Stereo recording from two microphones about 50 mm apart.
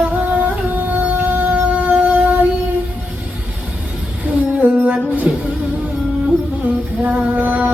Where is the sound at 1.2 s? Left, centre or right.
Right.